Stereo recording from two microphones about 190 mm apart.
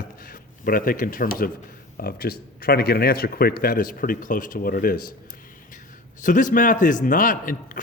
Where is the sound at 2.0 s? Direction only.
55° left (ahead or behind).